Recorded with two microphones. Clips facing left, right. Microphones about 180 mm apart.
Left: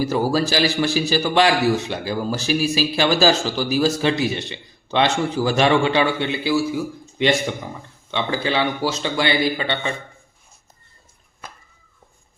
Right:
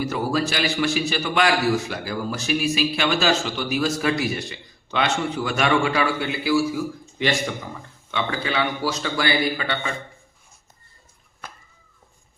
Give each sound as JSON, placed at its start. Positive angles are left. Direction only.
{"t": 0.0, "sound": "a man's voice", "side_deg": 35}
{"t": 8.1, "sound": "a man's voice", "side_deg": 30}